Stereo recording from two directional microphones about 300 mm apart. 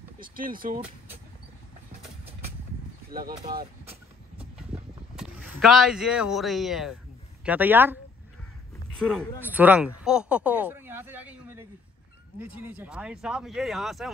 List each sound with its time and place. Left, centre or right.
0.2 s speech: right
3.1 s vehicle: right
5.1 s speech: centre
9.4 s speech: centre